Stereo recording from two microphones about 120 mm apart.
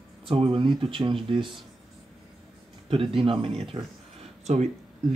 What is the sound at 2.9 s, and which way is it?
Speech, 50° right (ahead or behind).